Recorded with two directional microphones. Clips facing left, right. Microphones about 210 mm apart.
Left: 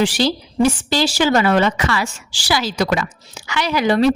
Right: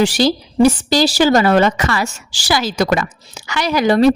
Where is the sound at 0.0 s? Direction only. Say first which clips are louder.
Right 3 dB; 40° right (ahead or behind).